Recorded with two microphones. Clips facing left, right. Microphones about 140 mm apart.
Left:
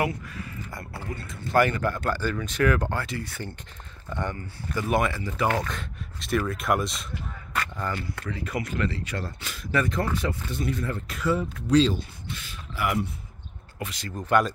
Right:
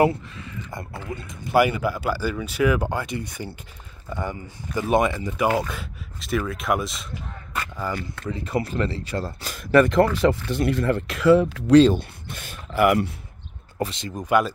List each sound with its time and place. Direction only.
0.0 s a sound: 25° right (ahead or behind)
1.1 s speech: 20° right (ahead or behind)
8.3 s speech: 30° right (ahead or behind)
9.6 s speech: 65° right (ahead or behind); by 11.8 s 90° right
11.8 s speech: 55° right (ahead or behind)
13.7 s speech: 25° right (ahead or behind); by 14.5 s 10° right (ahead or behind)